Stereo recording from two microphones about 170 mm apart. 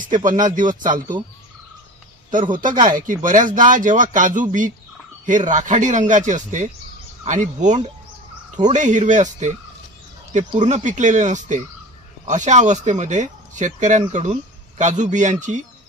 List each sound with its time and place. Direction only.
0.0 s speech: 50° right (ahead or behind)
2.8 s speech: 50° right (ahead or behind)